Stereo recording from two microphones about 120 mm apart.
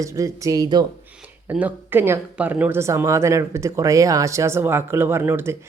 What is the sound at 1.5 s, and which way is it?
Speech, 15° right (ahead or behind).